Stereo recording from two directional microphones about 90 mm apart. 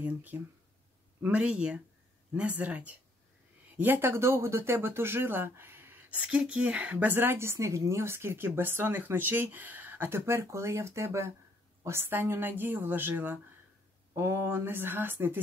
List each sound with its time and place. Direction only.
0.0 s speech: 20° right (ahead or behind)